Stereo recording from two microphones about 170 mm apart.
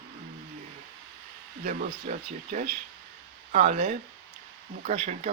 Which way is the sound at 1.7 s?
50° right (ahead or behind).